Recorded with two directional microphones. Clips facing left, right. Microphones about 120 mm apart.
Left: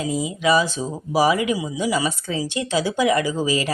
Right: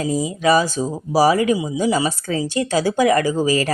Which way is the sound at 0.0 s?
40° right (ahead or behind).